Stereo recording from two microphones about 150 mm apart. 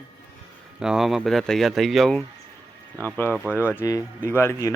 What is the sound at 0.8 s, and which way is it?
Speech, 5° right (ahead or behind).